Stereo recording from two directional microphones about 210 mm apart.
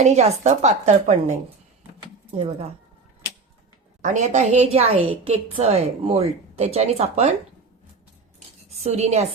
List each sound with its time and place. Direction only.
0.0 s a woman's voice: 30° right (ahead or behind)
2.0 s keys jangling: 30° right (ahead or behind)
4.0 s a woman's voice: 35° right (ahead or behind)
8.8 s a woman's voice: 30° right (ahead or behind)